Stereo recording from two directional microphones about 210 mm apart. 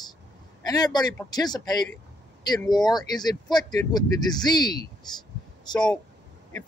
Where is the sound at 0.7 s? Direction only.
20° left (ahead or behind).